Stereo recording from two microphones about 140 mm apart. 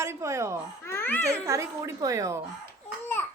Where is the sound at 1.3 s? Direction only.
20° right (ahead or behind).